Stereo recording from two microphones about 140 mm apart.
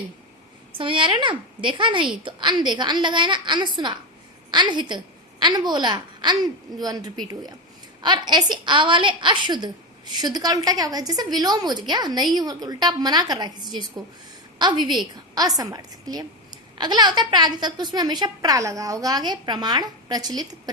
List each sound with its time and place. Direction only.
0.8 s a woman's voice: 35° right (ahead or behind)